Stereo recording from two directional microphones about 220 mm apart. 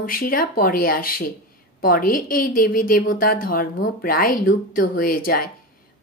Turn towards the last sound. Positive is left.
turn(degrees=40)  # may be behind; listen again after turning